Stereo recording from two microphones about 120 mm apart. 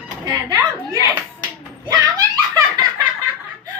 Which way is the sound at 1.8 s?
35° right (ahead or behind).